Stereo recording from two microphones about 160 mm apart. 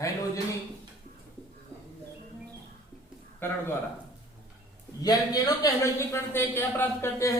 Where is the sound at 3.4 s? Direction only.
15° left (ahead or behind).